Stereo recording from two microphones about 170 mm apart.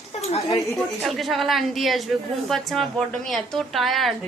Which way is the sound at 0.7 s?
Centre (ahead or behind).